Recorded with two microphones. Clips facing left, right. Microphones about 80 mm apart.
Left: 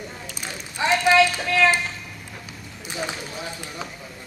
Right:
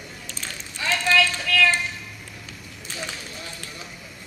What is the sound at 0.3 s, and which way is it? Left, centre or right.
Run, centre.